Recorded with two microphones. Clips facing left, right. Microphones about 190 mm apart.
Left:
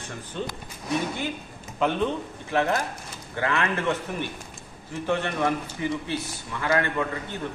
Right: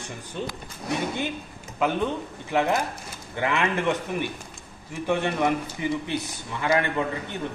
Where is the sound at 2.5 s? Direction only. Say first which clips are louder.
Right 1 dB; 15° right (ahead or behind).